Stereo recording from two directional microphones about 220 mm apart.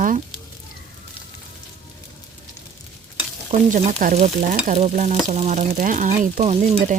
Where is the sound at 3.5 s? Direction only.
35° right (ahead or behind).